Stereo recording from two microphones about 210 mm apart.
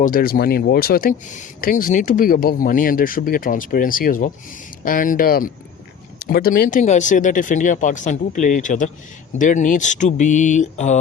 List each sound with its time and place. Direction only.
0.0 s speech: 45° left (ahead or behind)